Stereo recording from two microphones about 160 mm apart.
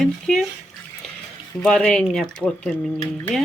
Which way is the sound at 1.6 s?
5° left (ahead or behind).